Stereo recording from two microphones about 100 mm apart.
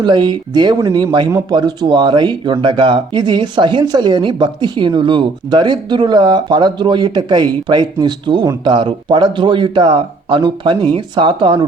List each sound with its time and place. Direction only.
0.0 s speech: 50° right (ahead or behind)